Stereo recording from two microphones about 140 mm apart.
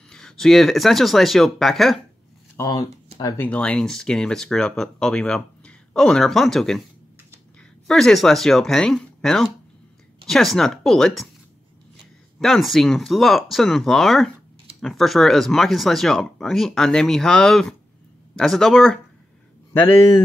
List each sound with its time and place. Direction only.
0.1 s speech: 5° left (ahead or behind)
2.5 s speech: 25° left (ahead or behind)
3.3 s speech: 10° left (ahead or behind)
7.8 s speech: 5° left (ahead or behind)
12.4 s speech: centre (ahead or behind)
19.7 s speech: 15° left (ahead or behind)